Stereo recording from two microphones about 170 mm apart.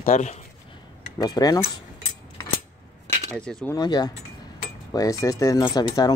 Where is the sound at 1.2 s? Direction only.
20° left (ahead or behind).